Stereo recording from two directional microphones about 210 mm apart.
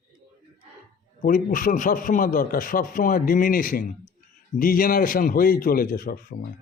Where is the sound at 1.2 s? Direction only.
40° left (ahead or behind).